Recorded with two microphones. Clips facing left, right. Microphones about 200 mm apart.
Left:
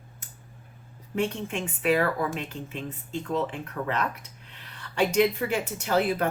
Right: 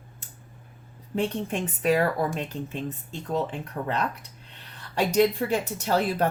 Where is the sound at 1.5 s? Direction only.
40° right (ahead or behind).